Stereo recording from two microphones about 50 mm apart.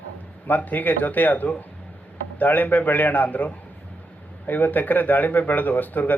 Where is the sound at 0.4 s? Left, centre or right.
Left.